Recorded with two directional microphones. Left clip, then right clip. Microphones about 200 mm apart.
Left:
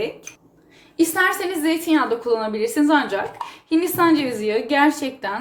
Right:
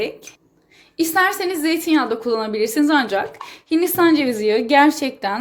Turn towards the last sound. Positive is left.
turn(degrees=-45)  # may be behind; listen again after turning